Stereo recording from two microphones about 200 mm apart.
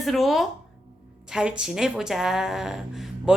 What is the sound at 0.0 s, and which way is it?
Speech, centre (ahead or behind).